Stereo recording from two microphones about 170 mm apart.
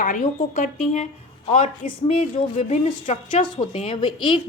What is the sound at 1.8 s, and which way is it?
A woman's voice, 50° left (ahead or behind).